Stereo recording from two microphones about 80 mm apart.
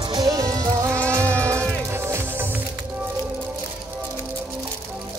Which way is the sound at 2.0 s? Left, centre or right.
Right.